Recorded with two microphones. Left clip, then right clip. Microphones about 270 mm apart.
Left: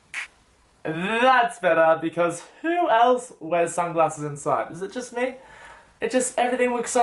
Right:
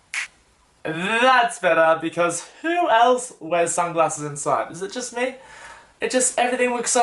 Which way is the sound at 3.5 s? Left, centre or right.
Centre.